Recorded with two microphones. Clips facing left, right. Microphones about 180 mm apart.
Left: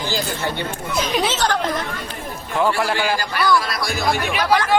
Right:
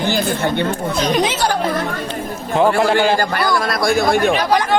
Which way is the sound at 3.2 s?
50° right (ahead or behind).